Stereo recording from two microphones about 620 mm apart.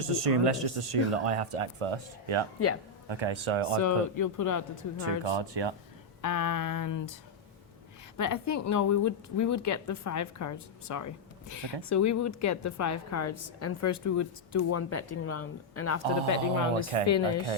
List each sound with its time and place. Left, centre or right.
0.0 s speech: right
3.8 s a woman's voice: left
5.2 s speech: right
6.2 s a woman's voice: left
8.2 s a woman's voice: left
16.9 s speech: right